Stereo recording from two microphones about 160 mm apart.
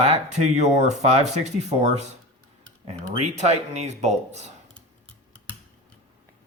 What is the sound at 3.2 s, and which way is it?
Speech, 45° right (ahead or behind).